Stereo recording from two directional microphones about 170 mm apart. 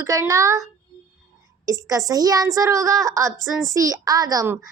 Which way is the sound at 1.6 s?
20° right (ahead or behind).